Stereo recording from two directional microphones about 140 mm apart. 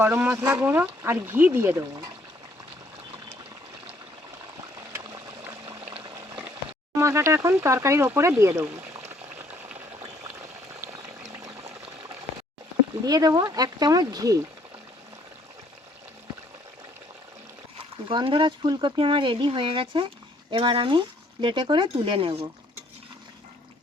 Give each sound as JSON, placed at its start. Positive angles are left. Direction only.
{"t": 0.0, "sound": "speech", "side_deg": -20}
{"t": 4.9, "sound": "pour", "side_deg": -15}
{"t": 6.9, "sound": "speech", "side_deg": -20}
{"t": 9.5, "sound": "boiling", "side_deg": -10}
{"t": 13.1, "sound": "speech", "side_deg": -25}
{"t": 18.1, "sound": "speech", "side_deg": -35}